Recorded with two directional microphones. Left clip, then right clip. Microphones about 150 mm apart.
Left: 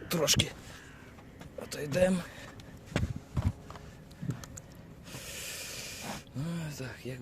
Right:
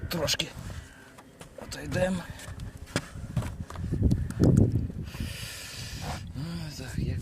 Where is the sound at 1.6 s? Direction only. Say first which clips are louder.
Left 1 dB; 25° left (ahead or behind).